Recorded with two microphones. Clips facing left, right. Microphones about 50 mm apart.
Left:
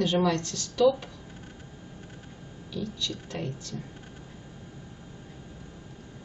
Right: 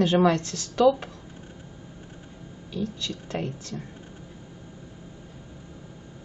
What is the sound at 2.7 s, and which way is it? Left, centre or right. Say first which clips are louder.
Speech: right 2 dB; right.